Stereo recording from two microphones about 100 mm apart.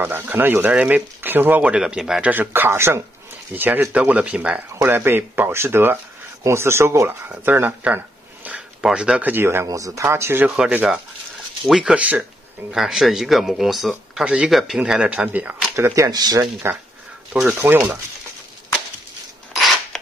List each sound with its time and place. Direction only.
0.0 s speech: 20° right (ahead or behind)
2.3 s speech: 20° right (ahead or behind)
8.8 s speech: 5° right (ahead or behind)
9.3 s speech: 25° right (ahead or behind)
9.7 s speech: 35° right (ahead or behind)
10.4 s speech: 15° right (ahead or behind)
15.7 s speech: 30° right (ahead or behind)
16.6 s speech: 25° right (ahead or behind)
17.3 s speech: 10° right (ahead or behind)
19.5 s a sound: centre (ahead or behind)